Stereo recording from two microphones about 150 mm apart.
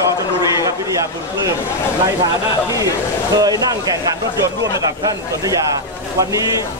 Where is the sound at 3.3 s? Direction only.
25° right (ahead or behind).